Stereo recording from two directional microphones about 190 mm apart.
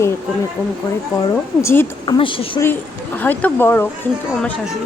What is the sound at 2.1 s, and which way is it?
Speech, 25° left (ahead or behind).